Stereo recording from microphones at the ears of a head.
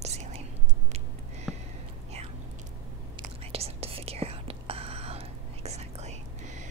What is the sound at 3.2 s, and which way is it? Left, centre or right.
Whispering, right.